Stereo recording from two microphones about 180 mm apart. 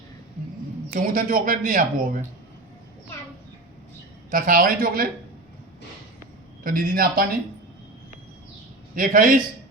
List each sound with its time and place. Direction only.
0.9 s speech: 50° right (ahead or behind)
4.3 s speech: 50° right (ahead or behind)
6.7 s speech: 55° right (ahead or behind)
9.0 s speech: 50° right (ahead or behind)